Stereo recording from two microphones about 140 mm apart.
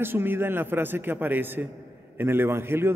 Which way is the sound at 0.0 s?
15° right (ahead or behind).